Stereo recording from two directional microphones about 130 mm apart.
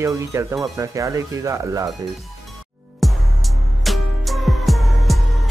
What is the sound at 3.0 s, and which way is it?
Music, centre (ahead or behind).